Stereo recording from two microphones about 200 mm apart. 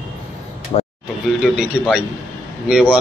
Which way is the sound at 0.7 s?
30° left (ahead or behind).